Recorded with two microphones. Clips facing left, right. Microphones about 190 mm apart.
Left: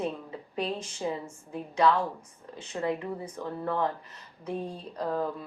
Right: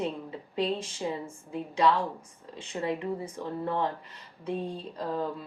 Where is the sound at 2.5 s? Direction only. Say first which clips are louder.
Left 1 dB; 25° right (ahead or behind).